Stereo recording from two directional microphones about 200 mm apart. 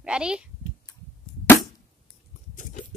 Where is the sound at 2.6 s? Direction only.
40° left (ahead or behind).